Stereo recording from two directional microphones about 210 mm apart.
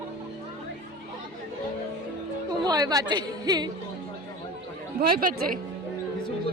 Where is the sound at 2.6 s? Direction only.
20° right (ahead or behind).